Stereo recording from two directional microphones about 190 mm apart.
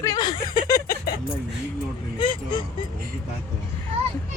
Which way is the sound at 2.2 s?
25° left (ahead or behind).